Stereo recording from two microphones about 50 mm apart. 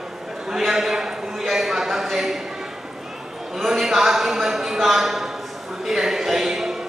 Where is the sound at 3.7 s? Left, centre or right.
Centre.